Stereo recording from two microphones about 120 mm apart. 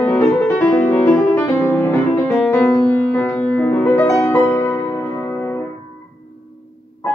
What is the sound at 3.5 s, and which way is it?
Music, 15° left (ahead or behind).